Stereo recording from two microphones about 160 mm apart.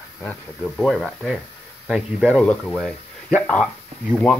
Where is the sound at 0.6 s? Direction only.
Centre (ahead or behind).